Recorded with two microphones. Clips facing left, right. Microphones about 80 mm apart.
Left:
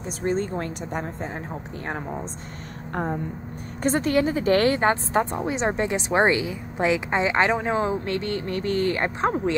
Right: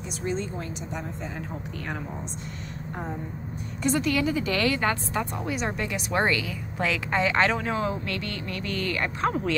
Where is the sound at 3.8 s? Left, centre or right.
Left.